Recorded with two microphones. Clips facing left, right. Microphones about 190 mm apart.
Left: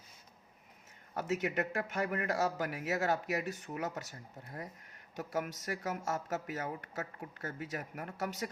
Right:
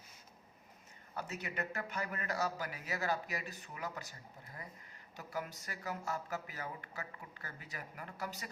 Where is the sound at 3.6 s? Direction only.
45° left (ahead or behind).